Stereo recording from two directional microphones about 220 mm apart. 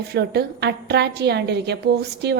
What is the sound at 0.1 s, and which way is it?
A woman's voice, 50° right (ahead or behind).